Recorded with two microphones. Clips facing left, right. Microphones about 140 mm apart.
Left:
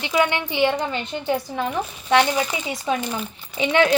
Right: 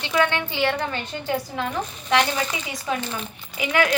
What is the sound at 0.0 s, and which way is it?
A woman's voice, 15° left (ahead or behind).